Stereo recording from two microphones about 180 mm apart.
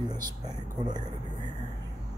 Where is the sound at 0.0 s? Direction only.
20° right (ahead or behind).